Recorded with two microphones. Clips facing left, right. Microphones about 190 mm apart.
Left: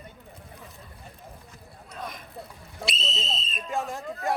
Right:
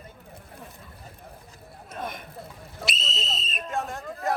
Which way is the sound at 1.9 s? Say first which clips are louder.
Right 3 dB; 25° right (ahead or behind).